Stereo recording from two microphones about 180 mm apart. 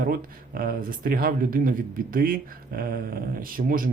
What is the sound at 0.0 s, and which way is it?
Speech, 55° right (ahead or behind).